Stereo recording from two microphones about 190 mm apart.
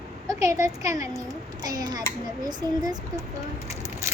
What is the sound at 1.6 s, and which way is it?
A child's voice, 20° right (ahead or behind).